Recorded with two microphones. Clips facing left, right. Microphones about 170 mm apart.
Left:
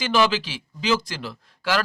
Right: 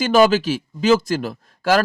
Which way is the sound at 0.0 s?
45° right (ahead or behind).